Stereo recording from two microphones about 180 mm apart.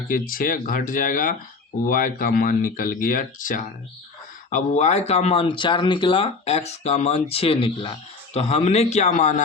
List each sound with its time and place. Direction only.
0.1 s speech: 50° left (ahead or behind)